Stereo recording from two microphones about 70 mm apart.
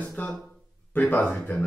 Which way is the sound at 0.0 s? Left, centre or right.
Left.